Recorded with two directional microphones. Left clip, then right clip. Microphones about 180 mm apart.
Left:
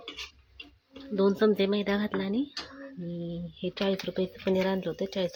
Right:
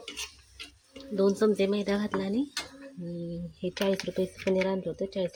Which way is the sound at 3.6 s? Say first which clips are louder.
Right 1 dB; 10° right (ahead or behind).